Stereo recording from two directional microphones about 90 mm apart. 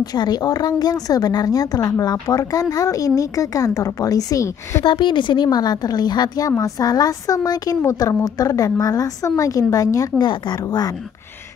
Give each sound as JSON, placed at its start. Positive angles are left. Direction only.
{"t": 0.0, "sound": "speech", "side_deg": 50}
{"t": 4.8, "sound": "a woman's voice", "side_deg": 65}
{"t": 10.2, "sound": "speech", "side_deg": 60}
{"t": 10.6, "sound": "speech", "side_deg": 45}